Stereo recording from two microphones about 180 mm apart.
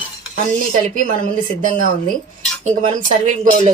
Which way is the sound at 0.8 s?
45° right (ahead or behind).